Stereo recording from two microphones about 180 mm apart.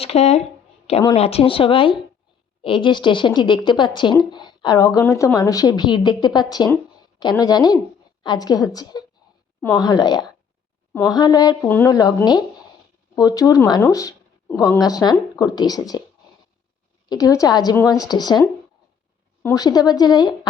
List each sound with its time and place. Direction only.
0.0 s speech: 35° left (ahead or behind)
17.1 s speech: 20° left (ahead or behind)
19.4 s speech: 10° left (ahead or behind)